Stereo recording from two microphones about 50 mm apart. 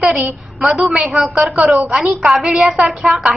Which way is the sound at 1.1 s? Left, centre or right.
Centre.